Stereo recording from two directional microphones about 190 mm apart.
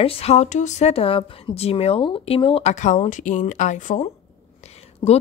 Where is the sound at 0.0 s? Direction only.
30° left (ahead or behind).